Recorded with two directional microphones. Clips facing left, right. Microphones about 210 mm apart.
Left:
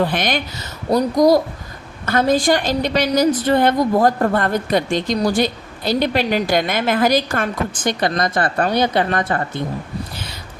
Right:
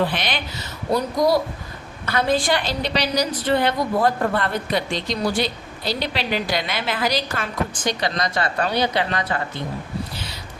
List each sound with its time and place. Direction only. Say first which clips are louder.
0.0 s a woman's voice: left 4 dB; 45° left (ahead or behind)